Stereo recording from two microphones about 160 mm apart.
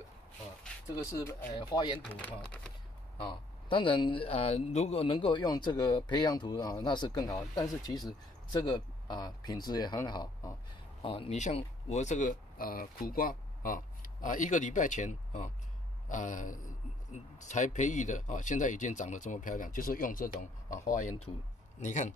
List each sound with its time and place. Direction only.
1.1 s speech: 20° left (ahead or behind)
2.1 s speech: 10° left (ahead or behind)
3.2 s speech: 30° left (ahead or behind)
11.0 s speech: 40° left (ahead or behind)